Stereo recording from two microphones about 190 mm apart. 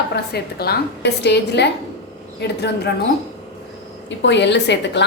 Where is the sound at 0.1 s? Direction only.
55° left (ahead or behind).